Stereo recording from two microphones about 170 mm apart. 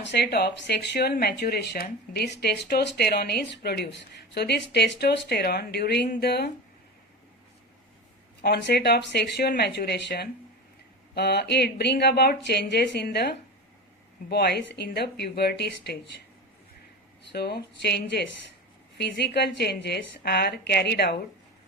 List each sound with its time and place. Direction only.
0.0 s speech: 85° left
8.4 s speech: 80° left
17.3 s speech: 75° left (ahead or behind)